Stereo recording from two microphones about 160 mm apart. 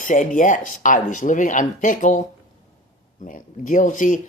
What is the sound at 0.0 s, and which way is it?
Speech, 50° left (ahead or behind).